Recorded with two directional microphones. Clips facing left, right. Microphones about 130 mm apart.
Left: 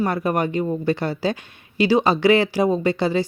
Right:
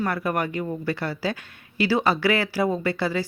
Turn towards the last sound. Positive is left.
turn(degrees=20)  # may be behind; listen again after turning